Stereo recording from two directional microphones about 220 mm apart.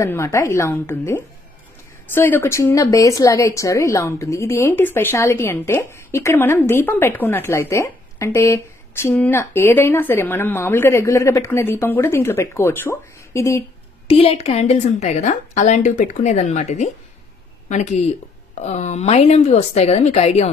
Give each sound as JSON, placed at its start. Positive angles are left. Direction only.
{"t": 0.0, "sound": "speech", "side_deg": 15}
{"t": 14.0, "sound": "a woman's voice", "side_deg": 25}